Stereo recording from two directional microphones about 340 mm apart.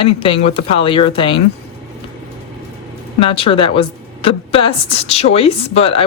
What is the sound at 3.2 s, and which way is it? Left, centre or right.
Speech, centre.